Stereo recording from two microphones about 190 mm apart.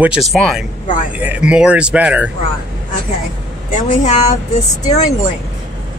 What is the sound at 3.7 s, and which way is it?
Speech, 40° left (ahead or behind).